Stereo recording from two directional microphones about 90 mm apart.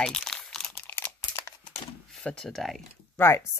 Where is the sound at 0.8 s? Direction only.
25° left (ahead or behind).